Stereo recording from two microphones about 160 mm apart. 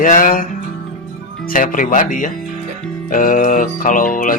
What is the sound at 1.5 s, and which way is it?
Speech, 60° left (ahead or behind).